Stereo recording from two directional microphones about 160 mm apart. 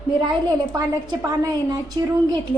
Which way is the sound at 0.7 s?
25° right (ahead or behind).